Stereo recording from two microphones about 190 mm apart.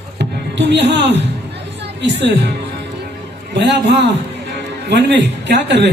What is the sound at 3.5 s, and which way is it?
A man's voice, 65° right (ahead or behind).